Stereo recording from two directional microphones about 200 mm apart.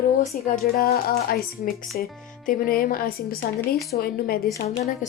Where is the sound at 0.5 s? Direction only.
45° left (ahead or behind).